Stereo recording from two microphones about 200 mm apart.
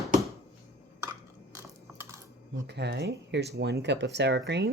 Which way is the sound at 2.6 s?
55° right (ahead or behind).